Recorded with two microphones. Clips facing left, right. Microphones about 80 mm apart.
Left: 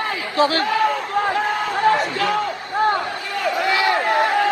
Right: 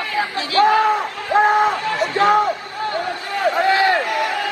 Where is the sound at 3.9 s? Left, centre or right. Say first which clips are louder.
Left 3 dB; left.